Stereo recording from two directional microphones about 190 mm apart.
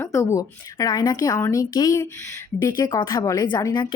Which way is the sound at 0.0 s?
15° left (ahead or behind).